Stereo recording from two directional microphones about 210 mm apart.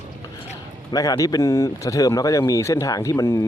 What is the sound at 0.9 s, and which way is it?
Speech, 15° left (ahead or behind).